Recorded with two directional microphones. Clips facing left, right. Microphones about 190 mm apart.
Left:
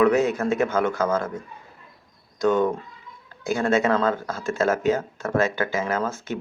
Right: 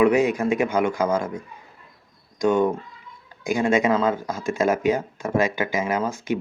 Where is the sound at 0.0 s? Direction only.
10° right (ahead or behind).